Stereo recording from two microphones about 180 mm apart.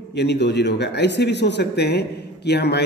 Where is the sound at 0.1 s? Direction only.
70° left (ahead or behind).